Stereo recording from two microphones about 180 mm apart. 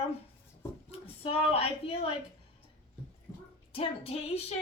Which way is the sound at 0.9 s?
30° left (ahead or behind).